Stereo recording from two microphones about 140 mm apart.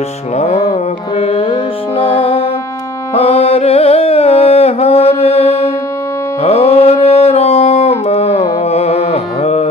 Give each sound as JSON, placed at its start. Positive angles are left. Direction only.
{"t": 1.1, "sound": "music", "side_deg": 45}